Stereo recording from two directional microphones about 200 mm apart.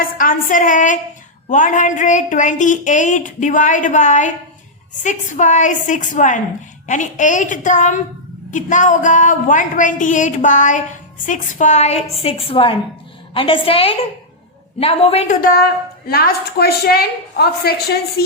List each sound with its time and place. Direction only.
0.0 s a woman's voice: 45° left (ahead or behind)
15.4 s a woman's voice: 45° left (ahead or behind)